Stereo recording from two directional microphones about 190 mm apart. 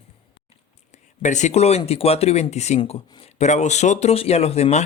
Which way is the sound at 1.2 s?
40° left (ahead or behind).